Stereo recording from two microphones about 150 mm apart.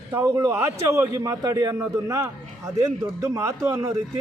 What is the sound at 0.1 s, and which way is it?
A man's voice, 20° right (ahead or behind).